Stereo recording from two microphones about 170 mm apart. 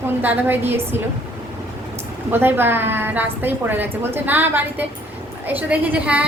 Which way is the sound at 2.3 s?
10° right (ahead or behind).